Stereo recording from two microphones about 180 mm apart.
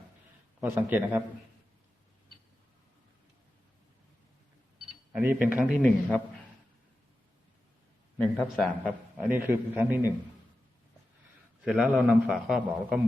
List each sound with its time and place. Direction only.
0.6 s a man's voice: 10° right (ahead or behind)
5.1 s a man's voice: 10° right (ahead or behind)
5.8 s speech: 10° left (ahead or behind)
8.4 s a man's voice: centre (ahead or behind)
11.6 s a man's voice: 5° right (ahead or behind)